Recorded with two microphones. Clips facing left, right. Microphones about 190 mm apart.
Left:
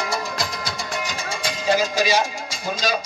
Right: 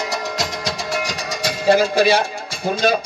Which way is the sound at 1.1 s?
40° right (ahead or behind).